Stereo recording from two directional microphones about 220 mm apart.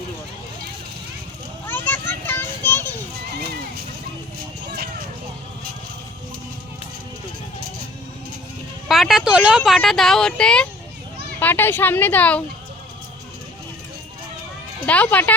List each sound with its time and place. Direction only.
1.6 s children playing: 10° left (ahead or behind)
4.7 s a sound: 45° right (ahead or behind)
8.9 s speech: centre (ahead or behind)
14.8 s speech: 5° left (ahead or behind)